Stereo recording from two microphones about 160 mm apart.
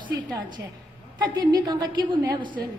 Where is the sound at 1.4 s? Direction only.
25° right (ahead or behind).